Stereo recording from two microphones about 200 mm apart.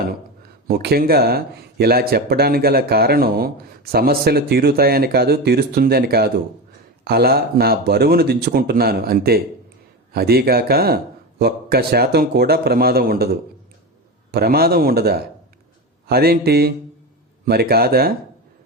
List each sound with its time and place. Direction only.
0.7 s speech: 50° right (ahead or behind)
14.3 s speech: 50° right (ahead or behind)